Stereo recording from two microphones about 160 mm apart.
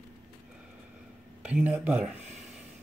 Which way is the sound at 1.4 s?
10° right (ahead or behind).